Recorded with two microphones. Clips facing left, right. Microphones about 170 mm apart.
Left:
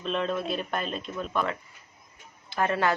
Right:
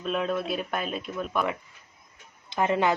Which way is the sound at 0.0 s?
5° right (ahead or behind).